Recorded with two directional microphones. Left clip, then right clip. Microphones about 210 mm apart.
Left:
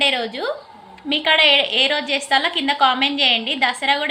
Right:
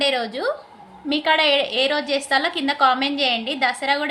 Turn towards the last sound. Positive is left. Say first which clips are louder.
# left 2 dB
turn(degrees=-20)  # may be behind; listen again after turning